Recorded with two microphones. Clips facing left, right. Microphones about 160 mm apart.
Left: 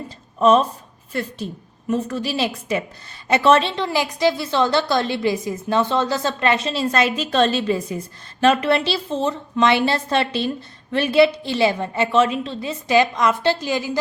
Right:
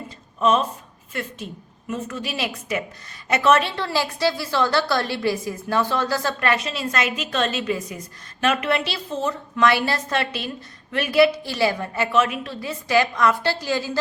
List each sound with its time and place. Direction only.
0.3 s a woman's voice: 35° left (ahead or behind); by 14.0 s 15° left (ahead or behind)